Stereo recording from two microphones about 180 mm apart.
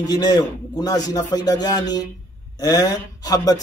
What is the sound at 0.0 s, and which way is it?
Speech, 20° left (ahead or behind).